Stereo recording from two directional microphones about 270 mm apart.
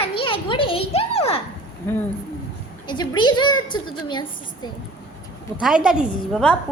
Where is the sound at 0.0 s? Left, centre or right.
Centre.